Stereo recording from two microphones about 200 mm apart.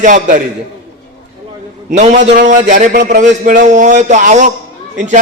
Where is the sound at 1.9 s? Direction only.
35° right (ahead or behind).